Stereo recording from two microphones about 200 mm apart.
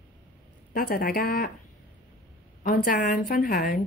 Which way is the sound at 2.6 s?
45° left (ahead or behind).